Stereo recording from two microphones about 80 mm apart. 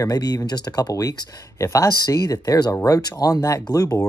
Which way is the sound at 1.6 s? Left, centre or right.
Left.